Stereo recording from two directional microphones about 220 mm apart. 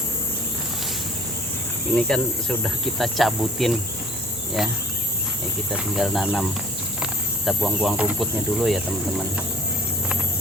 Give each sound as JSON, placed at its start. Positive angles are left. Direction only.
{"t": 2.0, "sound": "cricket", "side_deg": 5}
{"t": 5.7, "sound": "cricket", "side_deg": 0}
{"t": 7.0, "sound": "speech", "side_deg": -5}